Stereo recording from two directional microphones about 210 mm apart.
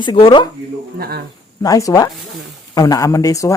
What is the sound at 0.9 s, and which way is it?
Speech, 50° right (ahead or behind).